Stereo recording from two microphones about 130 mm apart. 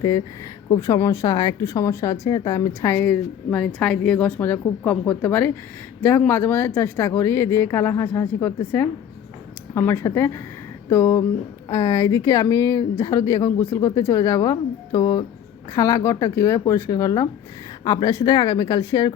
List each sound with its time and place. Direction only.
0.8 s speech: 25° left (ahead or behind)